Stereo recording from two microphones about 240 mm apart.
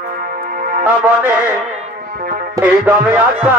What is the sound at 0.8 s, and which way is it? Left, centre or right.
Music, centre.